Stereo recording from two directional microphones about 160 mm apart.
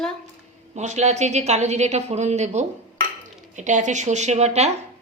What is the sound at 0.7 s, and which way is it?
Speech, 45° right (ahead or behind).